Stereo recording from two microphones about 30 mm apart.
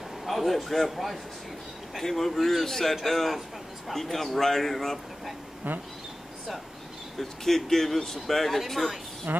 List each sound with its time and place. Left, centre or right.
0.2 s a man's voice: centre
5.6 s speech: right
7.2 s speech: centre
9.3 s speech: right